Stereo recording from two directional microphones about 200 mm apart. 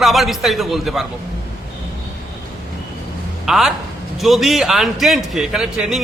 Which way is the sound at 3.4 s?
Centre (ahead or behind).